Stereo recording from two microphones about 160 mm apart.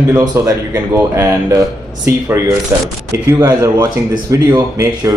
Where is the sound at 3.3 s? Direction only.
20° right (ahead or behind).